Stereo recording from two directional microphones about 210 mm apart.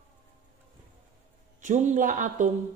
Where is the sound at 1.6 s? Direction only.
35° right (ahead or behind).